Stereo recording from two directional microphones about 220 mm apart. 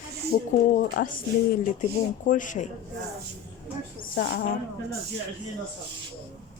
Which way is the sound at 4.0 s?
45° left (ahead or behind).